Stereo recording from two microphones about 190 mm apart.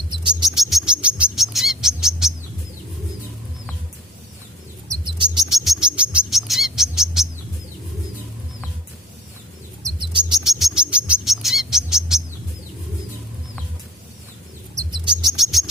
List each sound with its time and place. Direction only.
0.1 s bird: 25° right (ahead or behind)
0.4 s bird: centre (ahead or behind)
4.9 s bird: 25° right (ahead or behind)
5.5 s bird: centre (ahead or behind)
9.8 s bird: 25° right (ahead or behind)
10.4 s bird: centre (ahead or behind)
14.8 s bird: 20° right (ahead or behind)
15.3 s a sound: centre (ahead or behind)